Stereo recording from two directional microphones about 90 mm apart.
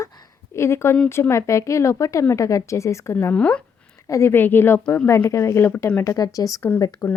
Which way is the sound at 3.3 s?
15° left (ahead or behind).